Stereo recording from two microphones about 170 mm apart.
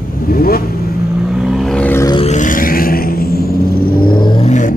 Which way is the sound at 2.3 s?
50° left (ahead or behind).